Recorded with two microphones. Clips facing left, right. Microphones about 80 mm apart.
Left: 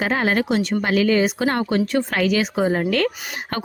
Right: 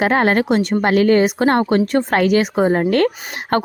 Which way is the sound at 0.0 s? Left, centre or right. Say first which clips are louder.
Right 5 dB; right.